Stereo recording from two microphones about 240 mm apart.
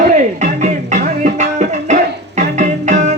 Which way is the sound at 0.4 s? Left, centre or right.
Right.